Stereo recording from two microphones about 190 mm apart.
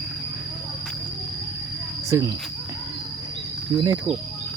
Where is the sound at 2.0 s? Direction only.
15° right (ahead or behind).